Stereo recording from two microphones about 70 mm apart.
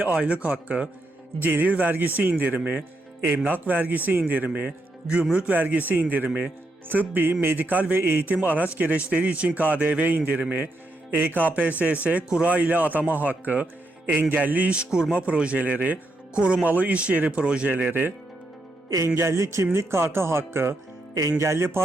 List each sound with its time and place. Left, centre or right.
0.0 s a man's voice: centre
18.9 s speech: right
21.1 s speech: right
21.3 s speech: right